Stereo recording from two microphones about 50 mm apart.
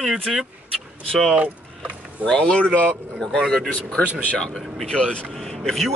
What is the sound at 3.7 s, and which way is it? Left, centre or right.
Speech, left.